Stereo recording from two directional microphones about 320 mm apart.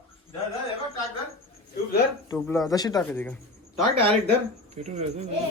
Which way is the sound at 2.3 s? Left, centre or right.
Centre.